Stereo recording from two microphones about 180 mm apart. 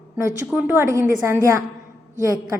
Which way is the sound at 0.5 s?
10° right (ahead or behind).